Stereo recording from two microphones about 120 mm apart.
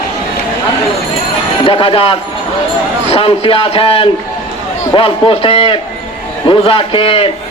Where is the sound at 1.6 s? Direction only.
50° left (ahead or behind).